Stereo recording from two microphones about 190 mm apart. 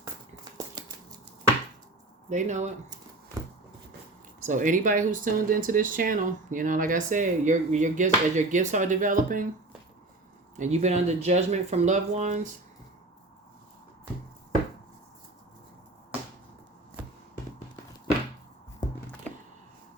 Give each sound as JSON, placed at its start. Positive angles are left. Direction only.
{"t": 2.3, "sound": "speech", "side_deg": -40}
{"t": 4.4, "sound": "speech", "side_deg": -40}
{"t": 10.6, "sound": "speech", "side_deg": -35}